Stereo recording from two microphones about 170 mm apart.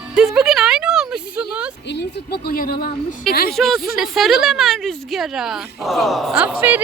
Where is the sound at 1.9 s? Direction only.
90° left; by 2.7 s 60° left (ahead or behind).